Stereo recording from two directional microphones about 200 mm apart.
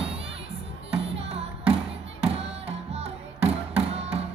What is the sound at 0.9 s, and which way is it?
Music, 30° right (ahead or behind).